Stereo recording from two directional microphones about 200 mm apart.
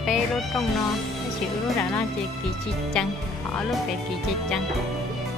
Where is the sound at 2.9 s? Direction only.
5° left (ahead or behind).